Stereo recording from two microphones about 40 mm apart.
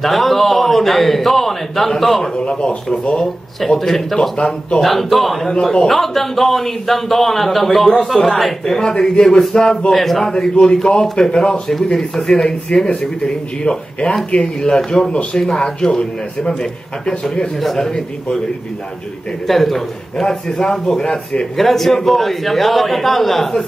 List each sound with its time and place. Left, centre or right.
0.0 s a man's voice: centre
2.3 s a man's voice: left
3.6 s a man's voice: centre
5.5 s a man's voice: centre
5.9 s a man's voice: centre
12.7 s a man's voice: left
19.4 s a man's voice: centre; by 21.5 s left
21.5 s a man's voice: centre